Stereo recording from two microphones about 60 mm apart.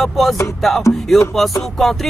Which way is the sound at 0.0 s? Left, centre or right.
Centre.